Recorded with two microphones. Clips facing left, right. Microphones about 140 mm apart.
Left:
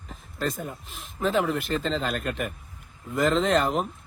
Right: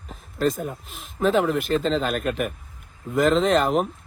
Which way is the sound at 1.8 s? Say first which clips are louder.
Right 5 dB; 35° right (ahead or behind).